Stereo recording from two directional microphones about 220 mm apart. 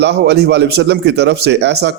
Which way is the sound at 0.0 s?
50° right (ahead or behind).